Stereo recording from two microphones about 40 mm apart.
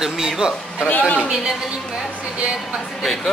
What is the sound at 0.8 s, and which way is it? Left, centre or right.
Speech, left.